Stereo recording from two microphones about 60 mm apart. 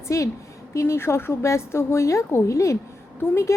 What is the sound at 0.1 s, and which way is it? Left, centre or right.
A woman's voice, left.